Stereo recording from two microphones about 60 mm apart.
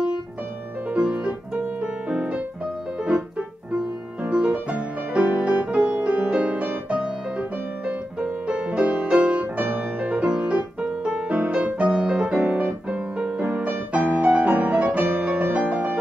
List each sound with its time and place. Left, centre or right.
0.8 s piano: right
3.0 s music: centre
12.4 s music: right